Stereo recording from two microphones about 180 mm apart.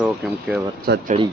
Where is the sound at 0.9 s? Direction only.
60° right (ahead or behind).